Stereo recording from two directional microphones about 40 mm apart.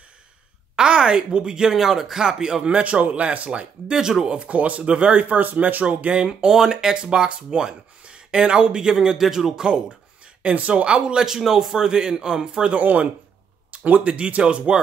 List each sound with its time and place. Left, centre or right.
0.7 s a man's voice: right
2.6 s speech: right
3.9 s a man's voice: centre
4.4 s speech: right
5.2 s speech: right
6.1 s speech: right
6.5 s speech: centre
10.4 s speech: right
11.2 s a man's voice: centre
12.7 s speech: right